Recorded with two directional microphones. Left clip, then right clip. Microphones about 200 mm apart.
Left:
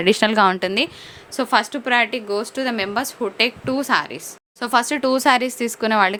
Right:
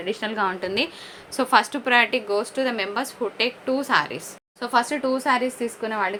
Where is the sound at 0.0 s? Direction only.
65° left (ahead or behind).